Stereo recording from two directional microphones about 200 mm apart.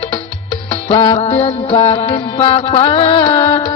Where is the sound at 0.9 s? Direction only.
25° left (ahead or behind).